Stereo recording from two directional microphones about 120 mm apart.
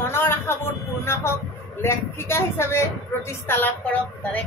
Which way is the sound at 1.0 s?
20° left (ahead or behind).